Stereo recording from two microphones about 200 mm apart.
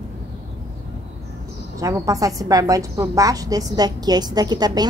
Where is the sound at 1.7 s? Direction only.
15° right (ahead or behind).